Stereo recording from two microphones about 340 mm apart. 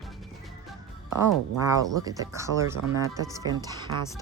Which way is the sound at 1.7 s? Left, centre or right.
Centre.